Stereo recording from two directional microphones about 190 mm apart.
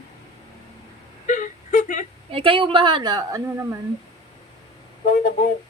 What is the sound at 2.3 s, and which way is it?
Speech, 25° right (ahead or behind).